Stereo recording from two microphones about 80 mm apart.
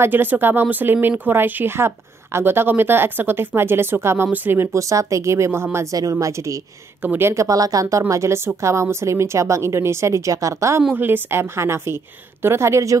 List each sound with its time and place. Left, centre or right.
0.0 s speech: right
4.7 s speech: right
5.9 s speech: right
7.0 s speech: right
7.4 s speech: right
8.1 s speech: right
10.9 s speech: right